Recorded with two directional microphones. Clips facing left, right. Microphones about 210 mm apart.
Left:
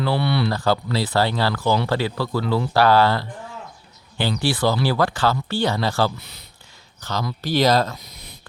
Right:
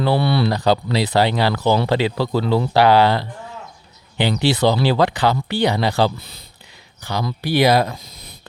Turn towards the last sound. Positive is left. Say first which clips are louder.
# right 2 dB
turn(degrees=-10)  # may be behind; listen again after turning